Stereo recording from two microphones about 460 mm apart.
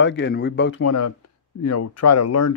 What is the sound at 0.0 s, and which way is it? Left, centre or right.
Speech, left.